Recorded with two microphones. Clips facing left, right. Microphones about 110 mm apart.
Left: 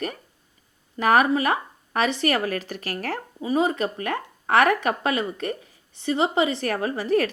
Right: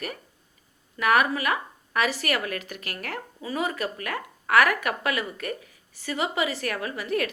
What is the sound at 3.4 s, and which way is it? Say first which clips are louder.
A woman's voice: left 6 dB; 25° left (ahead or behind).